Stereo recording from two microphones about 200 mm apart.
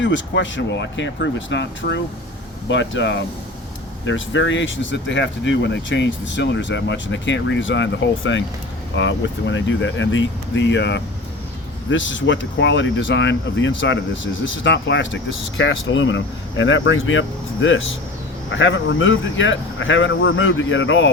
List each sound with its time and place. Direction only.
0.0 s speech: 65° left (ahead or behind)